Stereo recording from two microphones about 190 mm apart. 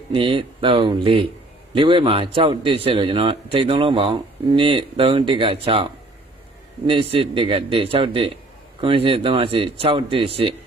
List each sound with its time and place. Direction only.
0.1 s a man's voice: 30° right (ahead or behind)